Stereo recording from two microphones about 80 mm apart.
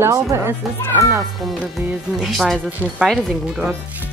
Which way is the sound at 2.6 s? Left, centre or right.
Centre.